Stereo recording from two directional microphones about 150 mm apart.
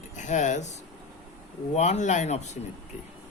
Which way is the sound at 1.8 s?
50° left (ahead or behind).